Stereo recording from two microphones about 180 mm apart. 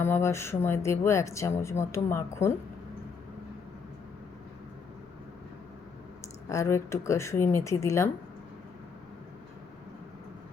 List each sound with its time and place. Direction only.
0.0 s speech: 15° left (ahead or behind)
6.5 s speech: 15° left (ahead or behind)